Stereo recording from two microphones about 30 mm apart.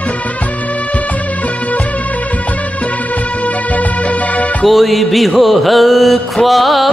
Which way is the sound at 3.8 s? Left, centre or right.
Left.